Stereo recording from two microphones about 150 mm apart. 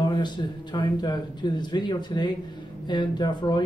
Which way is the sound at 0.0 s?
30° left (ahead or behind).